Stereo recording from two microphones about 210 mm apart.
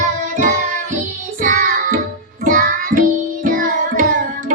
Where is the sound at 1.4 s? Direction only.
40° right (ahead or behind).